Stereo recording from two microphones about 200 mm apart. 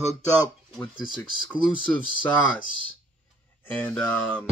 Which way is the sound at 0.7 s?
20° left (ahead or behind).